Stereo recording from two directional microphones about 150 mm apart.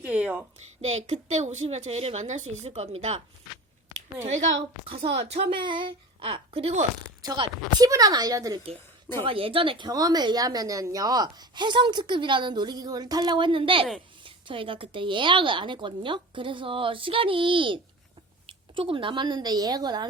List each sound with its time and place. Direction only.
0.0 s speech: 10° right (ahead or behind)
0.8 s a woman's voice: 50° right (ahead or behind)
4.9 s a woman's voice: 45° right (ahead or behind)
7.2 s a woman's voice: 25° right (ahead or behind)
9.1 s a woman's voice: 35° right (ahead or behind)